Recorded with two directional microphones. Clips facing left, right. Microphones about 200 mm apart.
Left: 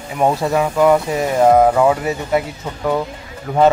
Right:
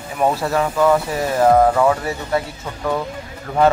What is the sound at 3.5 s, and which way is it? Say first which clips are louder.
Speech: left 3 dB; 15° left (ahead or behind).